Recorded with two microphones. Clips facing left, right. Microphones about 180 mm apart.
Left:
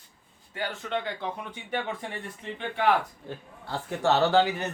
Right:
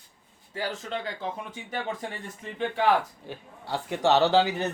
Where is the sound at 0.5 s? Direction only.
35° right (ahead or behind).